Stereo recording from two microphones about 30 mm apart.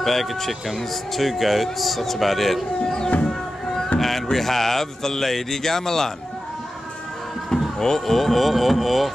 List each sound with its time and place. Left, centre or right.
0.0 s speech: centre
2.8 s music: left
4.0 s speech: centre
7.8 s speech: centre